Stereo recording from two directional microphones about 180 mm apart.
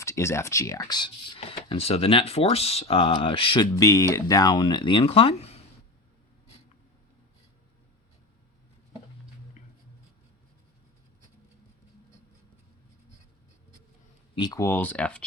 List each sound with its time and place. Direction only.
0.0 s speech: 15° left (ahead or behind); by 5.6 s 35° left (ahead or behind)
9.6 s a sound: 40° left (ahead or behind)
14.3 s speech: 20° left (ahead or behind)